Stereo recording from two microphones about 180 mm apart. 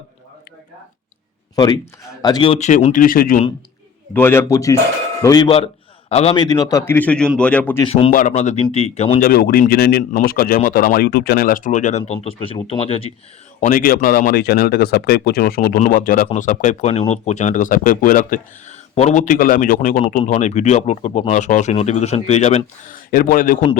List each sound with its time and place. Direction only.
1.5 s speech: 20° left (ahead or behind); by 3.4 s 50° left (ahead or behind)
4.1 s a man's voice: 15° left (ahead or behind)
6.1 s a man's voice: 35° left (ahead or behind); by 7.8 s 5° left (ahead or behind)
7.8 s speech: 35° left (ahead or behind)
9.2 s speech: 55° left (ahead or behind); by 13.1 s 30° left (ahead or behind)
13.6 s speech: 50° left (ahead or behind)